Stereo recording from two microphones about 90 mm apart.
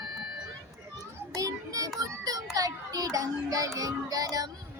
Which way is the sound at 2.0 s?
45° right (ahead or behind).